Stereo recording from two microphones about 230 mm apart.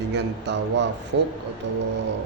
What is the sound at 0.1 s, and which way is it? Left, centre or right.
A man's voice, right.